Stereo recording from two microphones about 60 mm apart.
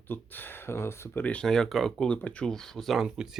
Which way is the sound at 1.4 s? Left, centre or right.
Centre.